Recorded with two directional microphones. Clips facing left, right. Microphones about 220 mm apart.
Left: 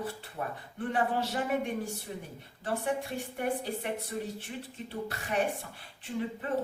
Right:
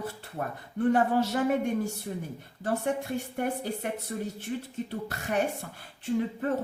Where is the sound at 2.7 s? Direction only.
45° right (ahead or behind).